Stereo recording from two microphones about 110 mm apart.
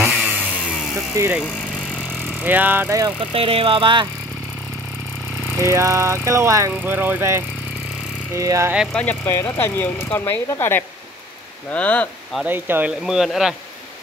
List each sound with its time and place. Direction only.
0.2 s vehicle: 15° right (ahead or behind)
1.1 s a sound: 30° right (ahead or behind)
2.4 s speech: 15° right (ahead or behind)
3.3 s speech: 60° right (ahead or behind)
5.6 s a sound: 25° right (ahead or behind)
8.9 s speech: 10° left (ahead or behind)
9.2 s speech: 25° left (ahead or behind)
12.4 s a sound: 20° right (ahead or behind)
13.0 s speech: centre (ahead or behind)